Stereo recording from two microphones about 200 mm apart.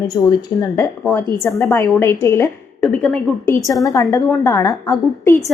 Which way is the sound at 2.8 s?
5° left (ahead or behind).